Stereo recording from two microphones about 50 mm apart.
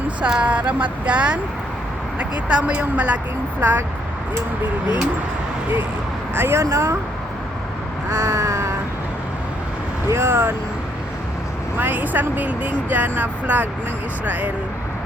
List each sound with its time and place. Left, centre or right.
0.2 s speech: centre
0.4 s speech: right
6.3 s speech: right
6.6 s speech: right
8.1 s vehicle: right
10.1 s speech: right
11.8 s speech: right